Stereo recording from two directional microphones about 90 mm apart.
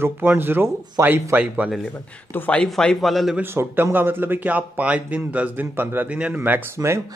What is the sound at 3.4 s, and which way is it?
A man's voice, 25° right (ahead or behind).